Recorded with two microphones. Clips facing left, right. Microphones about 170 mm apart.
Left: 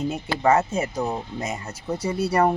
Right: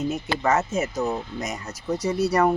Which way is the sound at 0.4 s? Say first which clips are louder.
Left 3 dB; 30° left (ahead or behind).